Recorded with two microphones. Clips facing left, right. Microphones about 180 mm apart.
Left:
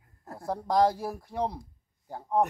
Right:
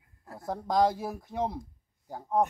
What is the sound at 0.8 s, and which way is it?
Speech, 20° right (ahead or behind).